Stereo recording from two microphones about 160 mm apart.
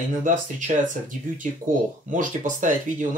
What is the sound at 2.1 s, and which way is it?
Speech, 55° right (ahead or behind).